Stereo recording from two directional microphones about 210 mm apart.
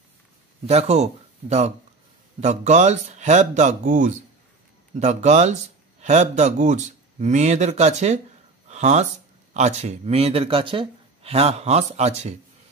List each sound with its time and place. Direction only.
0.7 s speech: 30° right (ahead or behind)
8.6 s a sound: 35° right (ahead or behind)
9.5 s speech: 35° right (ahead or behind)